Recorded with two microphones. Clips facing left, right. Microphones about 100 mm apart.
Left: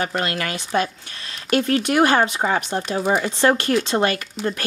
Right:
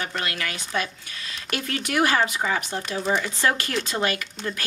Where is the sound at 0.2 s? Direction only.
35° left (ahead or behind).